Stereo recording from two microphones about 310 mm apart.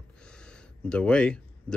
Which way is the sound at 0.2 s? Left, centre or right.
Centre.